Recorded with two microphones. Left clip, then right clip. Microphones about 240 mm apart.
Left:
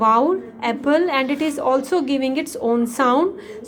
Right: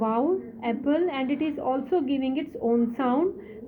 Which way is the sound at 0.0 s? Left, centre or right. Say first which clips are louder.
Left 9 dB; left.